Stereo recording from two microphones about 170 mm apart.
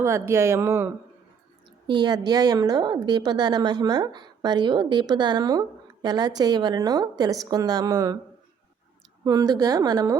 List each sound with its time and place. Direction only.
0.0 s speech: 15° right (ahead or behind)
1.9 s a woman's voice: 25° right (ahead or behind)
9.2 s a woman's voice: 20° right (ahead or behind)